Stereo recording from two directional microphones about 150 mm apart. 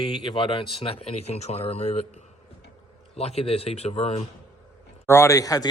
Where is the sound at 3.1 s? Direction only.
40° left (ahead or behind).